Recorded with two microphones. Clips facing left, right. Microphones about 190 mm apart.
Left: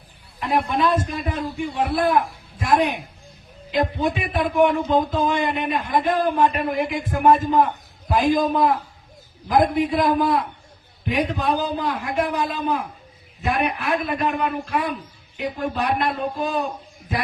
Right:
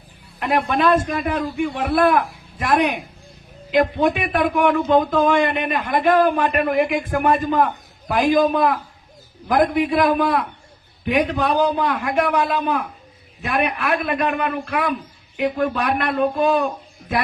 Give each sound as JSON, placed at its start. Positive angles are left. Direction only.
{"t": 0.3, "sound": "a man's voice", "side_deg": -85}
{"t": 13.4, "sound": "a man's voice", "side_deg": -80}